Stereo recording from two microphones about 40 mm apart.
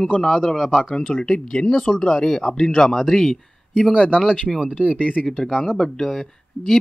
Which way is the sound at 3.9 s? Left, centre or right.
Centre.